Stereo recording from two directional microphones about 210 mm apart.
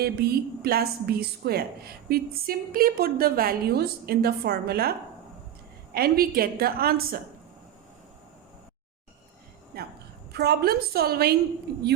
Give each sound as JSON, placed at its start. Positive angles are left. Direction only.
{"t": 0.0, "sound": "a woman's voice", "side_deg": -45}
{"t": 9.7, "sound": "a woman's voice", "side_deg": -45}